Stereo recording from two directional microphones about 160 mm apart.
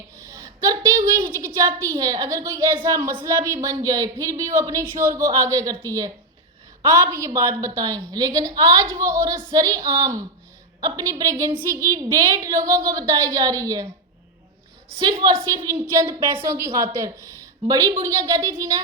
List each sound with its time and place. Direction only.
0.3 s a sound: 20° right (ahead or behind)
1.4 s a woman's voice: 15° right (ahead or behind)
14.9 s a woman's voice: 30° right (ahead or behind)